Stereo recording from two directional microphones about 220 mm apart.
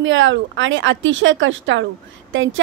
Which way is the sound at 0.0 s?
60° right (ahead or behind).